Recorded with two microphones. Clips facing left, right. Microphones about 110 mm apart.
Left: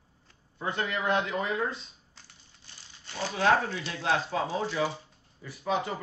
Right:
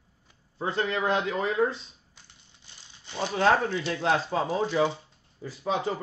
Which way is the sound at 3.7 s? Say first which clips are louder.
Right 4 dB; 40° right (ahead or behind).